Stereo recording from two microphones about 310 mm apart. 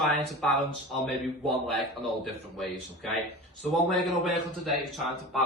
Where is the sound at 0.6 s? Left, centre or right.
Centre.